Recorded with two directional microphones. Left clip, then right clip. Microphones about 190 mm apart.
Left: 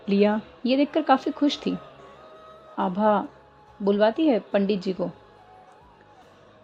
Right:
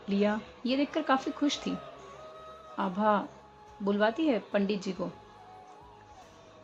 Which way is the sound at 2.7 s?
30° left (ahead or behind).